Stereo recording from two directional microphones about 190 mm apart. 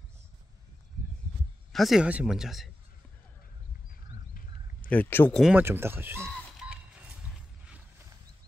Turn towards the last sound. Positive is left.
turn(degrees=-5)  # may be behind; listen again after turning